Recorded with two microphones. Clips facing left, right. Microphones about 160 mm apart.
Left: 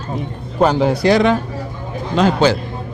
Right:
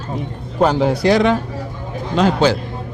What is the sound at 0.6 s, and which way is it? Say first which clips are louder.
Speech: left 1 dB; 55° left (ahead or behind).